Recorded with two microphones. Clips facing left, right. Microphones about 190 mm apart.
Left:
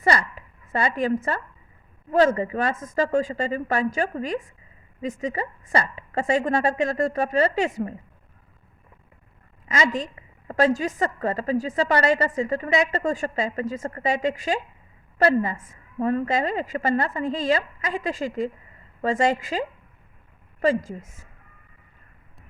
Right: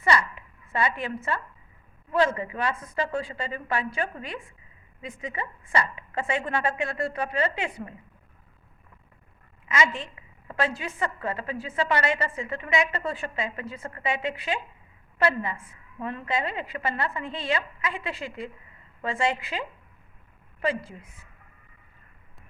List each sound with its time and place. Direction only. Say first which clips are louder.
0.0 s a woman's voice: left 2 dB; 40° left (ahead or behind)
9.6 s a woman's voice: left 3 dB; 35° left (ahead or behind)